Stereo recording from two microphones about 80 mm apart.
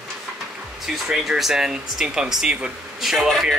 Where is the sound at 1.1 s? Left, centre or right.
Centre.